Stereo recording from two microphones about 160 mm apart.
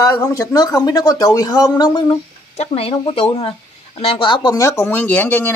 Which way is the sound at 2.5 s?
40° left (ahead or behind).